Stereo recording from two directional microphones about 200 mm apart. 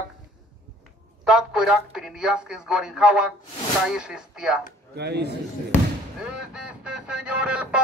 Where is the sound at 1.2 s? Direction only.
5° right (ahead or behind).